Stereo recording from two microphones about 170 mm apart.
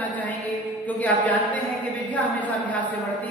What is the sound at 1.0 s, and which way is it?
A woman's voice, 10° left (ahead or behind).